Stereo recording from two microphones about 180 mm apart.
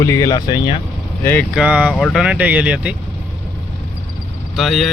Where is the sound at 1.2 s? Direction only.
10° left (ahead or behind).